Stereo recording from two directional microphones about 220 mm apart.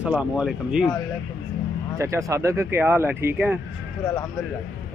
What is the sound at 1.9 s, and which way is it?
Speech, 15° right (ahead or behind).